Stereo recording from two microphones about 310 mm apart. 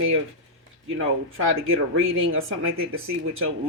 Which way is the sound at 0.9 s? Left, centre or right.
Right.